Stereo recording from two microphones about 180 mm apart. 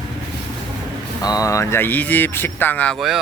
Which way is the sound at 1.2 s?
20° left (ahead or behind).